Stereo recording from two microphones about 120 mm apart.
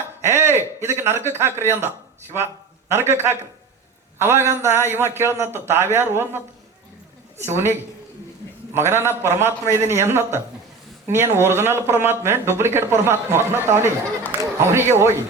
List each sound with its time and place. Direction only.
0.2 s a sound: 20° right (ahead or behind)
2.9 s speech: 20° right (ahead or behind)
7.4 s speech: 20° right (ahead or behind)